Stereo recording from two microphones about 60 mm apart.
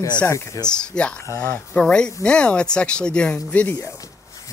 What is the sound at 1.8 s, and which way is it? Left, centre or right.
Speech, centre.